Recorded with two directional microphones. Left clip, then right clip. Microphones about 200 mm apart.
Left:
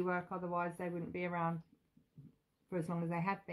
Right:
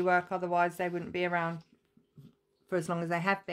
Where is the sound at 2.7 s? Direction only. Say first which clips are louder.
Right 9 dB; 50° right (ahead or behind).